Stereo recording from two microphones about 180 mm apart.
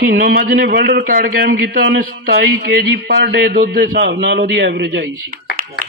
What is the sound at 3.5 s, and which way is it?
Speech, 50° right (ahead or behind).